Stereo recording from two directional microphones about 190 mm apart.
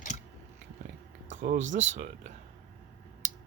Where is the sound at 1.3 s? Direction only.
40° right (ahead or behind).